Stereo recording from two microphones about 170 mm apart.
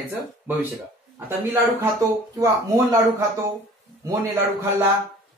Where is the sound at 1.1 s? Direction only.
15° right (ahead or behind).